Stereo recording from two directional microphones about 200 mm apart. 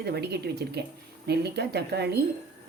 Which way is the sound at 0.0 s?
55° right (ahead or behind).